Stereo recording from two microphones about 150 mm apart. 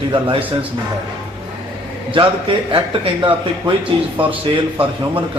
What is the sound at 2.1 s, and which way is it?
Speech, 35° right (ahead or behind).